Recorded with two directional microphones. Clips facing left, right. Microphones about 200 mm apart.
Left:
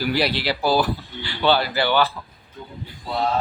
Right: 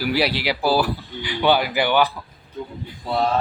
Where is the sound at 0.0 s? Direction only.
10° right (ahead or behind).